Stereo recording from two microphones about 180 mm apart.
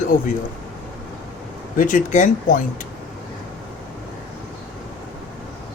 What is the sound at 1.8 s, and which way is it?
Speech, 45° left (ahead or behind).